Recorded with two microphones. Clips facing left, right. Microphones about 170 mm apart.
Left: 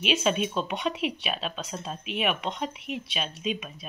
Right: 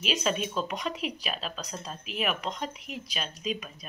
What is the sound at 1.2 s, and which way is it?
Speech, centre (ahead or behind).